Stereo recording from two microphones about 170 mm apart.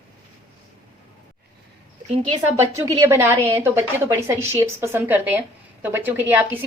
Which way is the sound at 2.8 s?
20° right (ahead or behind).